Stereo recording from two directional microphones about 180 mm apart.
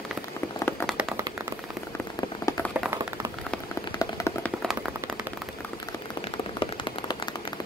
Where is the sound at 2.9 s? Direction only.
15° right (ahead or behind).